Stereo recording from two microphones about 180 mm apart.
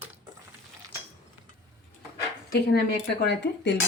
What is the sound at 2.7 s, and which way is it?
Speech, 70° left (ahead or behind).